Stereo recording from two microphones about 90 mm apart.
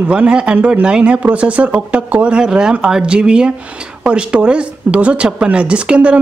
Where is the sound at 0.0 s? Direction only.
10° right (ahead or behind).